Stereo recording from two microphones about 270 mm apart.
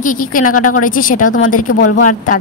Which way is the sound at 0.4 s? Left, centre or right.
Left.